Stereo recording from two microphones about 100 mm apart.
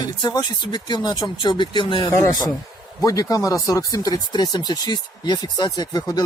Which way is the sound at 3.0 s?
35° left (ahead or behind).